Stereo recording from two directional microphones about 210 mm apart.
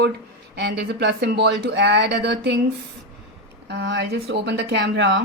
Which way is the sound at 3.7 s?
55° right (ahead or behind).